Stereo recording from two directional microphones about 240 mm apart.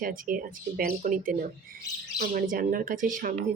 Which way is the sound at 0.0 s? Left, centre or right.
Right.